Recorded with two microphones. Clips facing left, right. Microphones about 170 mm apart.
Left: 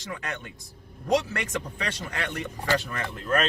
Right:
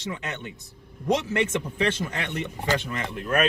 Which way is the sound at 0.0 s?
20° right (ahead or behind).